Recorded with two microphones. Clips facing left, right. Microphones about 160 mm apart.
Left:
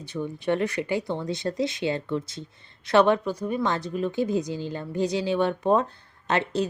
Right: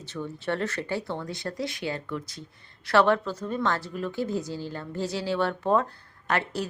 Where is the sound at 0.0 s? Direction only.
15° left (ahead or behind).